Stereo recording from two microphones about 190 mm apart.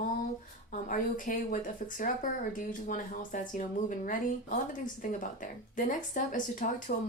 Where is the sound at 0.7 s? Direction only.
45° left (ahead or behind).